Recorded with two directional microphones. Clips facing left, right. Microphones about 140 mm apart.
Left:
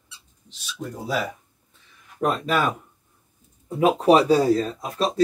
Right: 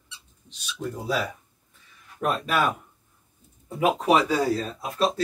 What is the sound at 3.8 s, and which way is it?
Speech, 35° left (ahead or behind).